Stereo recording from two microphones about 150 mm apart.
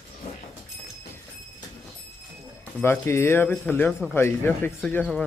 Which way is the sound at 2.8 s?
15° left (ahead or behind).